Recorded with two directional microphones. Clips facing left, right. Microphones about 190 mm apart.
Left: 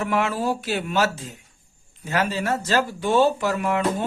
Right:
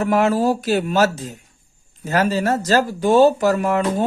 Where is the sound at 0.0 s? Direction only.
40° right (ahead or behind).